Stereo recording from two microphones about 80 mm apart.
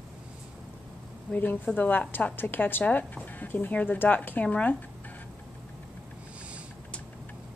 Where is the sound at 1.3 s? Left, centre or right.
Left.